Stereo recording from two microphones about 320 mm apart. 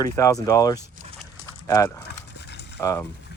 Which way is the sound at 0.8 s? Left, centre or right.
Centre.